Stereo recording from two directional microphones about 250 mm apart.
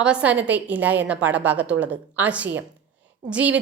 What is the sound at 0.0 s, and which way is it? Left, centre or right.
A woman's voice, centre.